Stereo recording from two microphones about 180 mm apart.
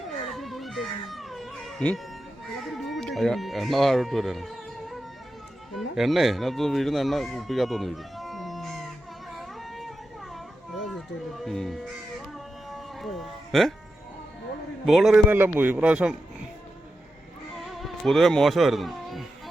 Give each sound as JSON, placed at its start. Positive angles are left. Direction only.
{"t": 0.3, "sound": "baby cry", "side_deg": 0}
{"t": 2.5, "sound": "speech", "side_deg": 0}
{"t": 9.3, "sound": "music", "side_deg": 0}
{"t": 11.4, "sound": "speech", "side_deg": 0}
{"t": 12.7, "sound": "music", "side_deg": 0}
{"t": 14.8, "sound": "a man's voice", "side_deg": 0}
{"t": 17.7, "sound": "speech", "side_deg": 0}